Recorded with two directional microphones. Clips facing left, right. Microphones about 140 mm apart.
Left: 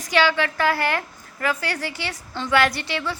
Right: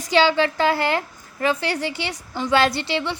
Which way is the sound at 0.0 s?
25° right (ahead or behind).